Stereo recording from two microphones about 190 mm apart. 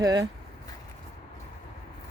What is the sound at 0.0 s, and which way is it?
Speech, 20° right (ahead or behind).